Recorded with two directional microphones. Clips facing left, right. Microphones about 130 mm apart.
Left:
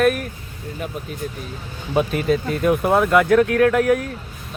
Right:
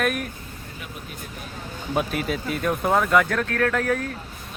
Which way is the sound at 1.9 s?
Centre (ahead or behind).